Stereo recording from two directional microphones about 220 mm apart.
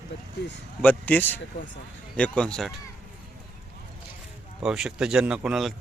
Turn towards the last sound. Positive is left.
turn(degrees=0)  # may be behind; listen again after turning